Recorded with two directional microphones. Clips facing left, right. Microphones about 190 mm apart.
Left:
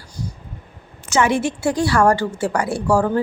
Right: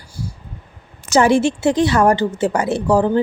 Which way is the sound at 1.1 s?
30° right (ahead or behind).